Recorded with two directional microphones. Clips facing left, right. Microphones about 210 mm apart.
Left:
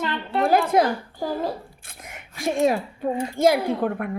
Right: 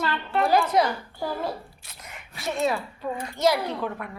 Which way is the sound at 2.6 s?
50° left (ahead or behind).